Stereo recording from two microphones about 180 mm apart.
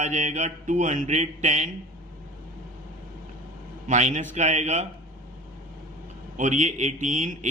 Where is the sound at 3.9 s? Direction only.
40° right (ahead or behind).